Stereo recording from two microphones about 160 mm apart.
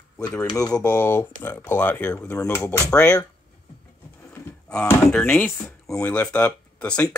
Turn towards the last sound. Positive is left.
turn(degrees=10)  # may be behind; listen again after turning